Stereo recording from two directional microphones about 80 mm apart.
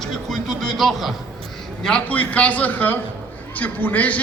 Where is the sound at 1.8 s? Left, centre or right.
Centre.